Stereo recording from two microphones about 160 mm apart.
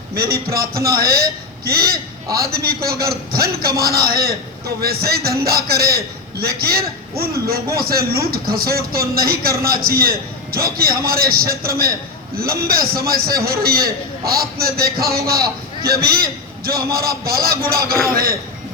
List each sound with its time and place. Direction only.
0.1 s a man's voice: 75° right (ahead or behind)